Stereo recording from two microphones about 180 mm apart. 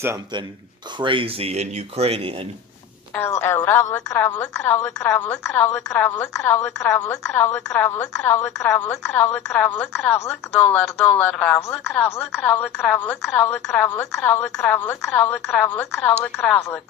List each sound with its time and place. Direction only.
0.9 s speech: 30° right (ahead or behind)
3.2 s speech: 15° left (ahead or behind)